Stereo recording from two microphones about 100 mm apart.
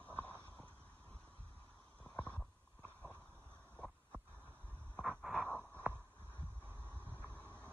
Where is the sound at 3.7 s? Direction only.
Centre (ahead or behind).